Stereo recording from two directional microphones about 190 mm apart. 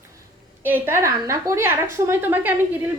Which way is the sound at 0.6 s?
10° right (ahead or behind).